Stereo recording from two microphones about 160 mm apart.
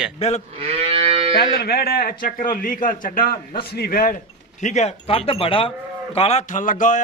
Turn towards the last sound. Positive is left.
turn(degrees=55)  # may be behind; listen again after turning